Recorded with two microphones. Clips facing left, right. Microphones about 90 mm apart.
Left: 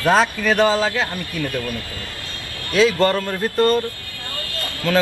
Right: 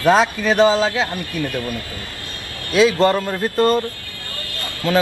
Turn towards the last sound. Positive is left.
turn(degrees=-20)  # may be behind; listen again after turning